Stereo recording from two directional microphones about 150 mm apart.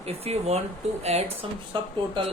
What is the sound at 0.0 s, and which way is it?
Speech, 45° right (ahead or behind).